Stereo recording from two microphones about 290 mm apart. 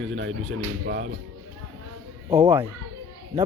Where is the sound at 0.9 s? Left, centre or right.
Right.